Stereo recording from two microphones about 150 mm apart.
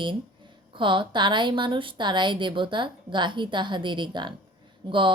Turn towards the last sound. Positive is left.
turn(degrees=-35)  # may be behind; listen again after turning